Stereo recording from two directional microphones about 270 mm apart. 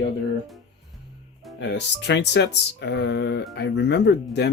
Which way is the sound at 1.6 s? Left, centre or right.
Left.